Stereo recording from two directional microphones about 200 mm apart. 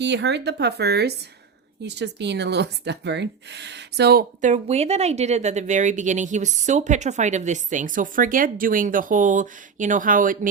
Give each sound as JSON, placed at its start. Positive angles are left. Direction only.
{"t": 0.0, "sound": "speech", "side_deg": -60}